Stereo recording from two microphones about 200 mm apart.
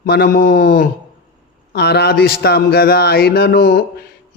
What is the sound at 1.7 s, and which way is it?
Speech, 55° left (ahead or behind).